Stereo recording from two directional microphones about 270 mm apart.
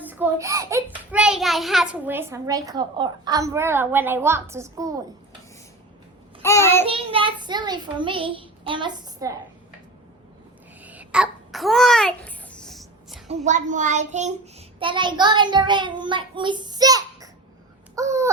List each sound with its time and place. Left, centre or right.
0.1 s a child's voice: centre
6.4 s child singing: centre
6.8 s a child's voice: centre
10.8 s babbling: centre
13.3 s a child's voice: right
17.9 s a sound: centre